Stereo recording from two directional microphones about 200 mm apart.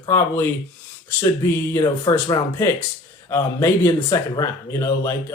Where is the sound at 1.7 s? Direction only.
20° left (ahead or behind).